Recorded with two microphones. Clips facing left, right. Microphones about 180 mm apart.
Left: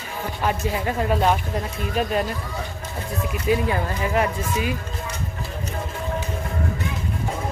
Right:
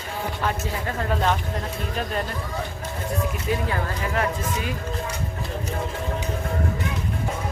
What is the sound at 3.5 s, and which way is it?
Speech, 10° left (ahead or behind).